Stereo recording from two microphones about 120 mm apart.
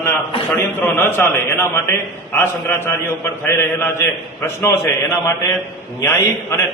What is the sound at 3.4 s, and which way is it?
A man's voice, 20° left (ahead or behind).